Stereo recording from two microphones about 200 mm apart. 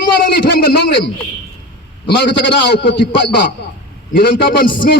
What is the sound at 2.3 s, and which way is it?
A man's voice, 60° left (ahead or behind).